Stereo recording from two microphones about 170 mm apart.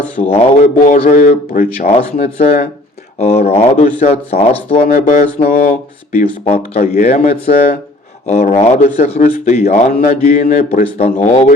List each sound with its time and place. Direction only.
0.2 s speech: 35° left (ahead or behind)
0.8 s speech: 50° left (ahead or behind); by 4.9 s 35° left (ahead or behind)
4.9 s speech: 55° left (ahead or behind)
8.3 s speech: 40° left (ahead or behind)